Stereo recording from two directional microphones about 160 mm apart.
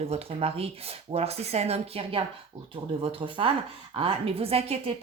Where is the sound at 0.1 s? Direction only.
40° right (ahead or behind).